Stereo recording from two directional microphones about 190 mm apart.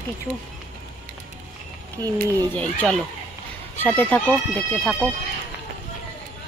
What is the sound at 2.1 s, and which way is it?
Speech, 5° left (ahead or behind).